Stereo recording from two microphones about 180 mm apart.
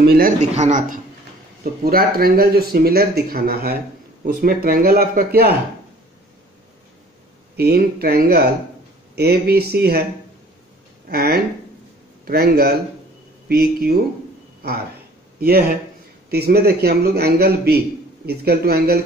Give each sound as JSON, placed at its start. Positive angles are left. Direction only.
{"t": 0.0, "sound": "a man's voice", "side_deg": -60}
{"t": 0.4, "sound": "speech", "side_deg": -40}
{"t": 1.6, "sound": "a man's voice", "side_deg": -55}
{"t": 7.5, "sound": "a man's voice", "side_deg": -60}
{"t": 11.1, "sound": "a man's voice", "side_deg": -60}
{"t": 15.4, "sound": "a man's voice", "side_deg": -55}